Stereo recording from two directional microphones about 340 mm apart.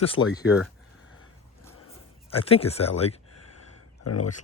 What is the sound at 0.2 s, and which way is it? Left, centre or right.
Speech, left.